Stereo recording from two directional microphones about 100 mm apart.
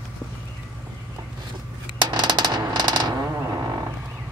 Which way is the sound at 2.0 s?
45° right (ahead or behind).